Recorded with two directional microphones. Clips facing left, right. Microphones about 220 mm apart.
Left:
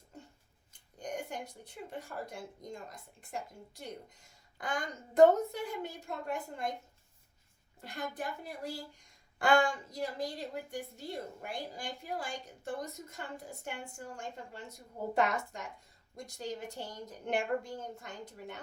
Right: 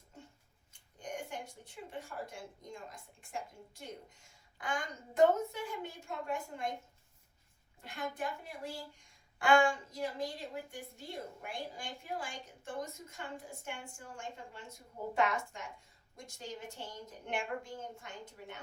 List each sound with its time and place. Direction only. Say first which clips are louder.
0.7 s speech: left 3 dB; 40° left (ahead or behind)
4.5 s a woman's voice: left 2 dB; 40° left (ahead or behind)
7.8 s a woman's voice: even; 40° left (ahead or behind)